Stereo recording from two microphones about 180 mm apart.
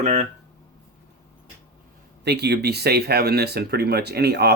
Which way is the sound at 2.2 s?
65° right (ahead or behind).